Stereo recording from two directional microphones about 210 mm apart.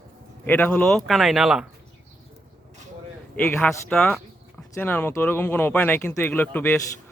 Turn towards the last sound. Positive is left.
turn(degrees=10)  # may be behind; listen again after turning